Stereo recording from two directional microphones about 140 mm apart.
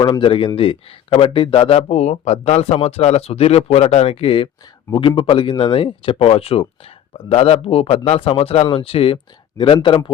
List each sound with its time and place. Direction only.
0.0 s speech: 35° left (ahead or behind)